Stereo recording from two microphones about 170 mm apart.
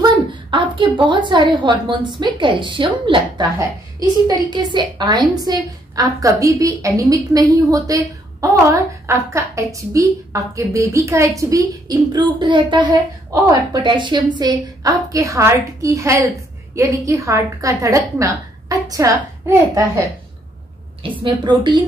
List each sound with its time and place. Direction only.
0.0 s a sound: 30° right (ahead or behind)
1.3 s a woman's voice: 30° right (ahead or behind)
21.0 s a woman's voice: 30° right (ahead or behind)